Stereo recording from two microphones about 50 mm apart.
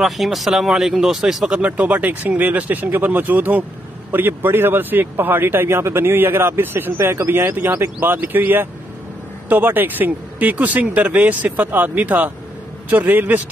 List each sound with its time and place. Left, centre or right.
0.0 s speech: centre
1.8 s speech: right
7.0 s speech: right